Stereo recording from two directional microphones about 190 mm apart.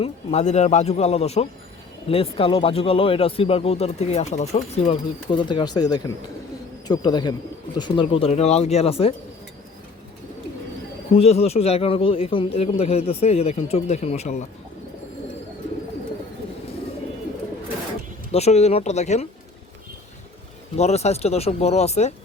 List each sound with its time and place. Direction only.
0.0 s a man's voice: 35° left (ahead or behind)
11.2 s a man's voice: 35° left (ahead or behind)
18.3 s a man's voice: 35° left (ahead or behind)
20.7 s a man's voice: 35° left (ahead or behind)